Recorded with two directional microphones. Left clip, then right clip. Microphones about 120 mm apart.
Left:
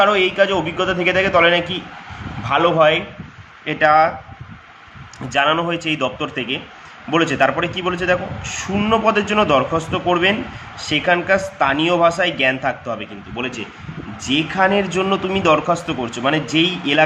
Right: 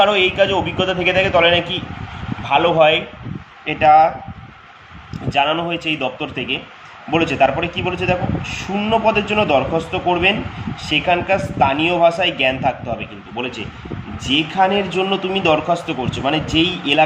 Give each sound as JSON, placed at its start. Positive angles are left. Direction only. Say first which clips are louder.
{"t": 0.0, "sound": "a man's voice", "louder": "even", "side_deg": 25}
{"t": 3.7, "sound": "speech", "louder": "right 2 dB", "side_deg": 40}
{"t": 5.3, "sound": "a man's voice", "louder": "left 1 dB", "side_deg": 45}